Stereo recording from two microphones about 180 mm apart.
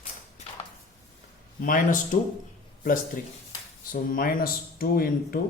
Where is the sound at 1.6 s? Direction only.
50° left (ahead or behind).